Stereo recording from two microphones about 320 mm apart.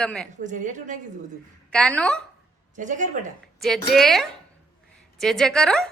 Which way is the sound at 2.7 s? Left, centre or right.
Right.